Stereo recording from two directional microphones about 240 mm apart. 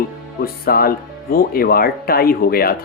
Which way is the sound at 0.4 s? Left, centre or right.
Left.